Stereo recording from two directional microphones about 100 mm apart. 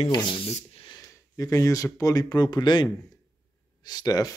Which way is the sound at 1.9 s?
35° left (ahead or behind).